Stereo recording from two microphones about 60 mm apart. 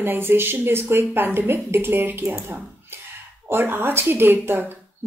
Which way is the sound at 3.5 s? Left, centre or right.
Right.